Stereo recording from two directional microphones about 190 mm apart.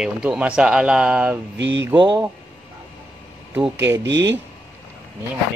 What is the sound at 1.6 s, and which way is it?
Speech, 70° right (ahead or behind).